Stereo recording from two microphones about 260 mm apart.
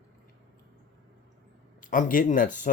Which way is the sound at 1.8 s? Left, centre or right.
Left.